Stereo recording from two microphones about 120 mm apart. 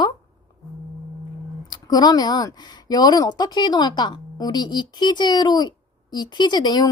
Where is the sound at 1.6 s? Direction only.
35° left (ahead or behind).